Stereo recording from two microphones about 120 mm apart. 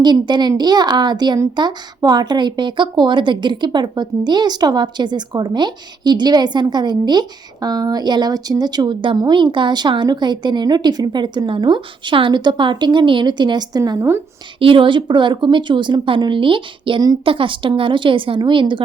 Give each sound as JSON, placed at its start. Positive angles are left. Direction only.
{"t": 0.0, "sound": "speech", "side_deg": -35}
{"t": 14.6, "sound": "a woman's voice", "side_deg": -45}